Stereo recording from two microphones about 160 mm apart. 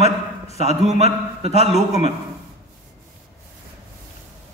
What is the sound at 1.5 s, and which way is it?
Speech, 40° left (ahead or behind).